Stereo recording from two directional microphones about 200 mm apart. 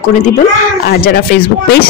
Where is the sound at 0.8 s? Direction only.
50° left (ahead or behind).